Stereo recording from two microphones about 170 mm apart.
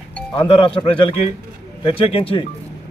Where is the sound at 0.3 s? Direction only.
30° left (ahead or behind).